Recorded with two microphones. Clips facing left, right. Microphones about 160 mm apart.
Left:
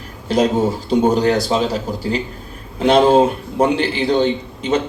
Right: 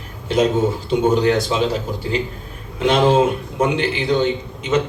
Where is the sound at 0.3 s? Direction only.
35° left (ahead or behind).